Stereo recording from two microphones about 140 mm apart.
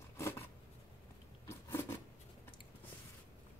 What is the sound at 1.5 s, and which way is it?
Scissors, 20° left (ahead or behind).